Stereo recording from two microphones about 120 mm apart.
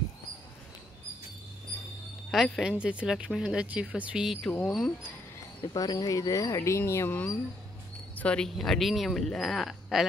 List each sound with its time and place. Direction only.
2.3 s speech: centre (ahead or behind)
5.7 s speech: 35° left (ahead or behind)
8.2 s speech: 10° left (ahead or behind)